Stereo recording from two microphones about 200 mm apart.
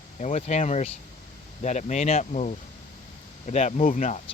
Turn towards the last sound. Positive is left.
turn(degrees=40)  # may be behind; listen again after turning